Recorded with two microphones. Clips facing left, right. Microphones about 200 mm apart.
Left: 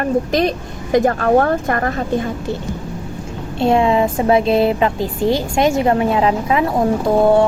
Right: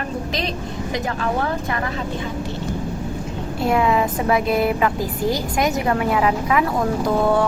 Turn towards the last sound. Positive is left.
turn(degrees=25)  # may be behind; listen again after turning